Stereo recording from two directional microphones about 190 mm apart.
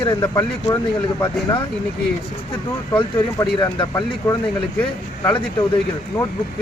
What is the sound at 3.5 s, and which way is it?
Speech, 25° left (ahead or behind).